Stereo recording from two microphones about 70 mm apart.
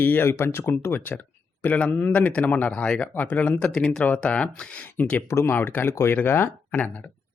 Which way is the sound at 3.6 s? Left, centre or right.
Centre.